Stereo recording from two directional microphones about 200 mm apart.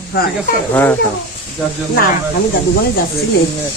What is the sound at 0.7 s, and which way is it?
Speech, 10° left (ahead or behind).